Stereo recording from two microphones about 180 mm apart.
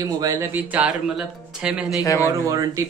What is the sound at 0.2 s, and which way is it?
Speech, 15° right (ahead or behind).